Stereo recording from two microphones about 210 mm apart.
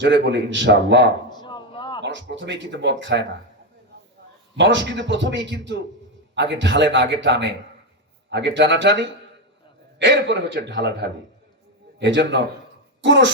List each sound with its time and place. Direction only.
0.0 s speech: 55° right (ahead or behind)
1.3 s a sound: 20° left (ahead or behind)
2.0 s speech: 60° right (ahead or behind)
4.5 s speech: 60° right (ahead or behind)